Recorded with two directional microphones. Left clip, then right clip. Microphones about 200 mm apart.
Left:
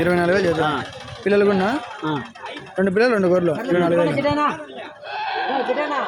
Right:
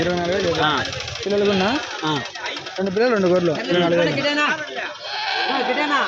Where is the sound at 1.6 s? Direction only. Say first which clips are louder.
Right 1 dB; 5° right (ahead or behind).